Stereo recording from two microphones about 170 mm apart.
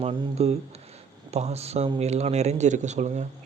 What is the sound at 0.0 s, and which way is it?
Speech, 30° right (ahead or behind).